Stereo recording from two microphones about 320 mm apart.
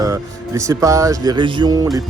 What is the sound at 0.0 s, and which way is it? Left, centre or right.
Speech, centre.